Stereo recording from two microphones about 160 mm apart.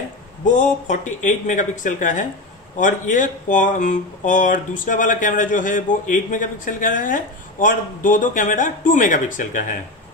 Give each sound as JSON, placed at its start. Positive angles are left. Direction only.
{"t": 0.5, "sound": "speech", "side_deg": 50}